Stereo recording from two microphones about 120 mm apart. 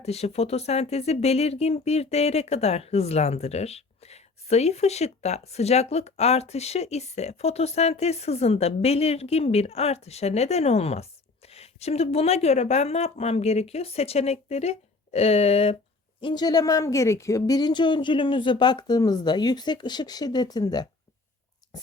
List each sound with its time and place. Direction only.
0.0 s speech: 60° left (ahead or behind)
16.2 s speech: 35° left (ahead or behind)